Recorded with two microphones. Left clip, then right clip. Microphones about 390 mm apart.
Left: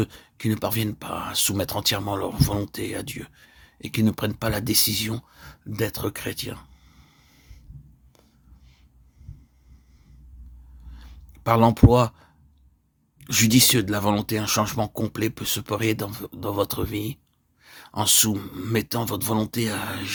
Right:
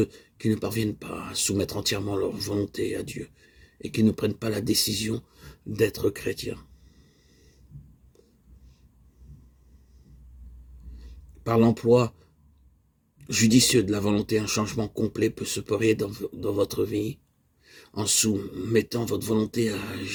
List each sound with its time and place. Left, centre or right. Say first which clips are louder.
0.0 s speech: right 2 dB; left
11.4 s speech: left 3 dB; left
13.1 s speech: left 2 dB; left